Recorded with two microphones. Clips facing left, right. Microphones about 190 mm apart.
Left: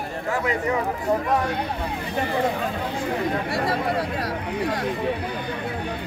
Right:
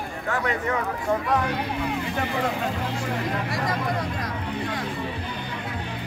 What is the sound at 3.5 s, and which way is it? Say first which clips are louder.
Speech: left 3 dB; 30° left (ahead or behind).